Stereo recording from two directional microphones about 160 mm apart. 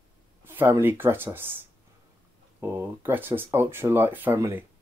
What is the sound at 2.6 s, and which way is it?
Speech, 15° right (ahead or behind).